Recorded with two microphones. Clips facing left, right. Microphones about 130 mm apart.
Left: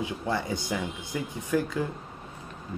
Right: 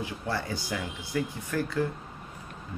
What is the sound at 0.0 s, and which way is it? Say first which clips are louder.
Speech: left 3 dB; 20° left (ahead or behind).